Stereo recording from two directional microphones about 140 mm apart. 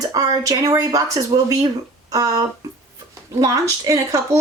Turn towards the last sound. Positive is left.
turn(degrees=-25)  # may be behind; listen again after turning